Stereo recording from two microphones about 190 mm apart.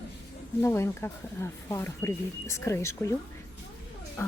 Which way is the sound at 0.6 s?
15° left (ahead or behind).